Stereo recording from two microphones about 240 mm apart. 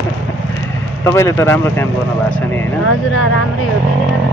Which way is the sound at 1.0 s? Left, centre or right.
Centre.